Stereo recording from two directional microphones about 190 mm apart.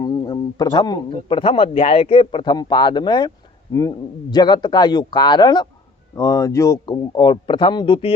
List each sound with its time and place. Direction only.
0.0 s speech: 20° left (ahead or behind)